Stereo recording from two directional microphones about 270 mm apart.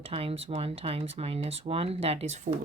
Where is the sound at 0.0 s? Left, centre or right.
Right.